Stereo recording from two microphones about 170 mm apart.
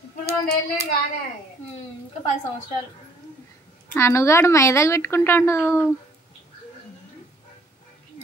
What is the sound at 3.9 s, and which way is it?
A woman's voice, 15° left (ahead or behind).